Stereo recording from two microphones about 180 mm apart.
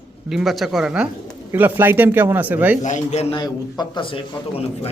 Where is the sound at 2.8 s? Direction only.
40° left (ahead or behind).